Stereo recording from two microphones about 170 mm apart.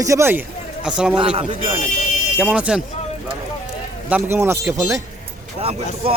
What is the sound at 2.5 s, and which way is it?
Speech, 5° right (ahead or behind).